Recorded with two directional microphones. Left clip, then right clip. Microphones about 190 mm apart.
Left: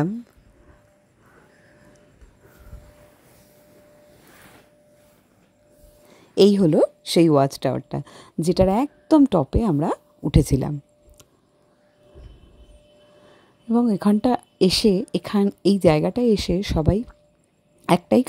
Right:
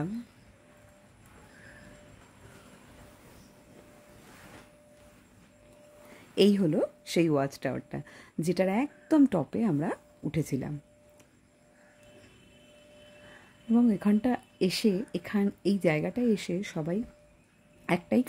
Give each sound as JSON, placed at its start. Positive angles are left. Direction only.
{"t": 6.3, "sound": "speech", "side_deg": 35}
{"t": 13.7, "sound": "speech", "side_deg": 35}